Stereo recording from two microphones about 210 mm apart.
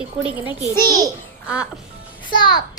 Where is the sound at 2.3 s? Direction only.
20° left (ahead or behind).